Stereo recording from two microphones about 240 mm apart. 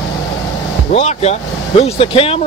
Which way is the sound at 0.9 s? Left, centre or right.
Left.